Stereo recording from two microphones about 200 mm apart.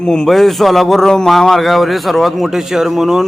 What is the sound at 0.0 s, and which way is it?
A man's voice, 5° left (ahead or behind).